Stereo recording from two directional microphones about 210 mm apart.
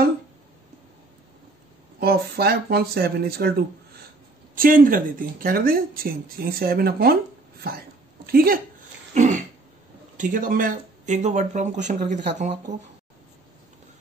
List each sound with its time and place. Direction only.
2.0 s speech: 50° right (ahead or behind)
8.3 s speech: 45° right (ahead or behind)
9.1 s throat clearing: 35° right (ahead or behind)
10.1 s speech: 40° right (ahead or behind)